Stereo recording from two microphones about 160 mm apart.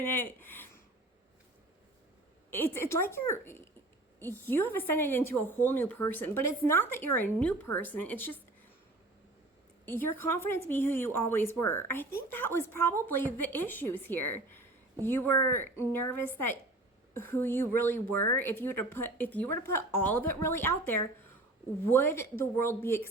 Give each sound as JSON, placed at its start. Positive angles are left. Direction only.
{"t": 0.0, "sound": "a woman's voice", "side_deg": 10}
{"t": 2.5, "sound": "a woman's voice", "side_deg": 15}
{"t": 9.8, "sound": "a woman's voice", "side_deg": 15}